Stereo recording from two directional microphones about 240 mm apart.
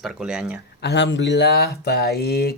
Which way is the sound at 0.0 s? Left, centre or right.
Centre.